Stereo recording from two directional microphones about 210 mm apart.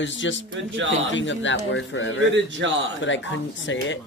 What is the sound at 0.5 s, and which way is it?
Speech, 65° right (ahead or behind).